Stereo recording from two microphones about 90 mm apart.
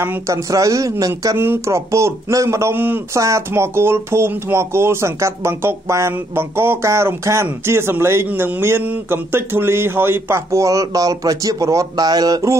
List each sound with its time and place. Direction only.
0.3 s a man's voice: 40° right (ahead or behind)
1.4 s a man's voice: 30° right (ahead or behind)
3.2 s speech: 35° right (ahead or behind)